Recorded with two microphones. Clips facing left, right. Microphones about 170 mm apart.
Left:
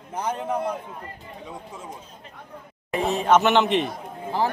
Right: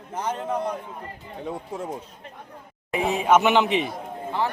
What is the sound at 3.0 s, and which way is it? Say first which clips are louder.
Speech: even; 10° right (ahead or behind).